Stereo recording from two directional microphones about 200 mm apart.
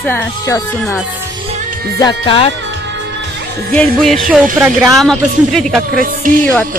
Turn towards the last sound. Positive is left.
turn(degrees=-45)  # may be behind; listen again after turning